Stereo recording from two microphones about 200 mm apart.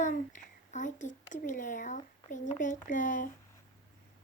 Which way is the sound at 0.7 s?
40° left (ahead or behind).